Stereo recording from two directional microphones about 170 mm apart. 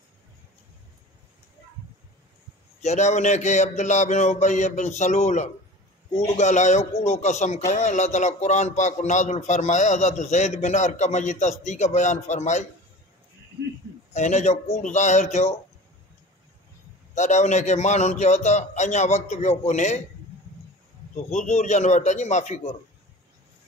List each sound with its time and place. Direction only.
2.8 s a man's voice: 45° left (ahead or behind)
14.1 s a man's voice: 45° left (ahead or behind)
17.1 s a man's voice: 45° left (ahead or behind)
21.3 s a man's voice: 45° left (ahead or behind)